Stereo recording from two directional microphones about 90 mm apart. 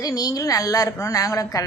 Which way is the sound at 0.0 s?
45° left (ahead or behind).